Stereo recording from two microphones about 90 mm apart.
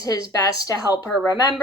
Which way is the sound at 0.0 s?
40° left (ahead or behind).